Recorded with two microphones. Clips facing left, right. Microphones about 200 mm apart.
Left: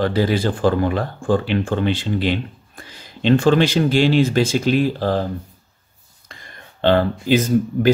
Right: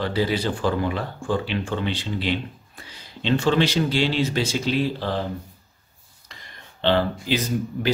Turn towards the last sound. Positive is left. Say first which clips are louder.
# left 8 dB
turn(degrees=50)  # may be behind; listen again after turning